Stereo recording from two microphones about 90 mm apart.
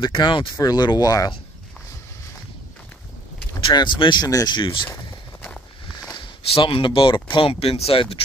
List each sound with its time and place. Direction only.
0.0 s speech: 60° left (ahead or behind)
0.6 s speech: 50° left (ahead or behind)
3.7 s speech: 55° left (ahead or behind)
4.6 s speech: 65° left (ahead or behind)
6.1 s speech: 65° left (ahead or behind); by 8.2 s 90° left